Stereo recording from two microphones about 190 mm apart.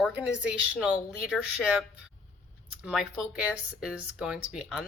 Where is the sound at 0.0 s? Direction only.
5° right (ahead or behind).